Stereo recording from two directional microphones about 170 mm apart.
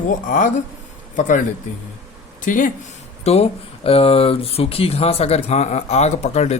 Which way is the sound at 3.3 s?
40° left (ahead or behind).